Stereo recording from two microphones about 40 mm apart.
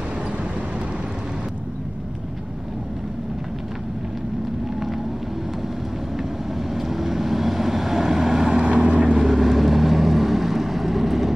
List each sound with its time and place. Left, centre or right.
6.7 s vehicle: centre
9.2 s vehicle: centre